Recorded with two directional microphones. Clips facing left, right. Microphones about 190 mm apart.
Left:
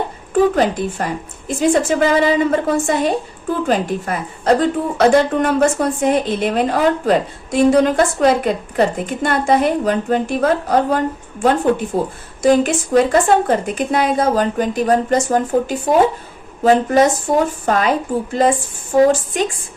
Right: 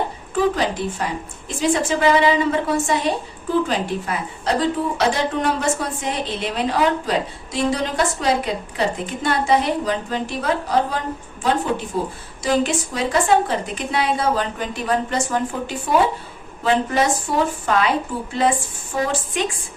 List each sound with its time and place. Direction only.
0.5 s a woman's voice: 50° left (ahead or behind)